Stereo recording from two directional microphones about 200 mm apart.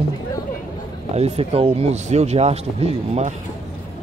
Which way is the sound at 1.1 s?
30° right (ahead or behind).